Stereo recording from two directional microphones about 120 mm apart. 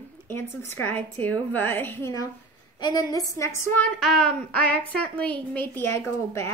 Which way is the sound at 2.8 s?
30° left (ahead or behind).